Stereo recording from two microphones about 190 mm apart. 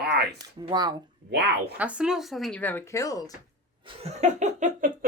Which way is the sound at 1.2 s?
60° right (ahead or behind).